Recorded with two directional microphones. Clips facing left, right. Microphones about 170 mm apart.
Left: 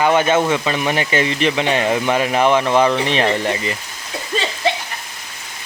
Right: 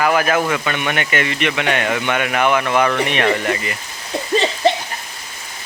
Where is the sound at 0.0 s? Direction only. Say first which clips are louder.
Left 2 dB; 25° left (ahead or behind).